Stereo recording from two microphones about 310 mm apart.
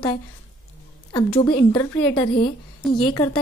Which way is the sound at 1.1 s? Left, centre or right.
Centre.